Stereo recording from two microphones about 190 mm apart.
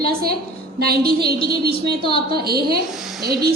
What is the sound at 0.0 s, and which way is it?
A woman's voice, 55° right (ahead or behind).